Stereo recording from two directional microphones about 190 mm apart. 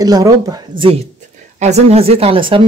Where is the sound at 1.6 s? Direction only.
35° right (ahead or behind).